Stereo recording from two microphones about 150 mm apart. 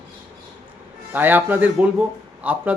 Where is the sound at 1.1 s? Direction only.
10° right (ahead or behind).